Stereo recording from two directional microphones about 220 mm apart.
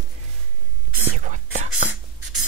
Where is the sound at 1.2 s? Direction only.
35° right (ahead or behind).